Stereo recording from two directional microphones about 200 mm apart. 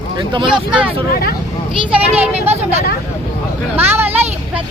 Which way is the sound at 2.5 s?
30° right (ahead or behind).